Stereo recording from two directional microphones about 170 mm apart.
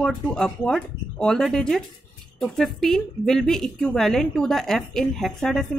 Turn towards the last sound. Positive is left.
turn(degrees=0)  # may be behind; listen again after turning